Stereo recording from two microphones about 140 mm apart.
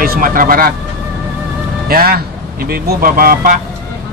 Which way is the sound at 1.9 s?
90° right.